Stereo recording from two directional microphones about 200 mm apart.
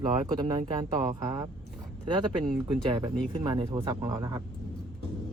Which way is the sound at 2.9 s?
25° right (ahead or behind).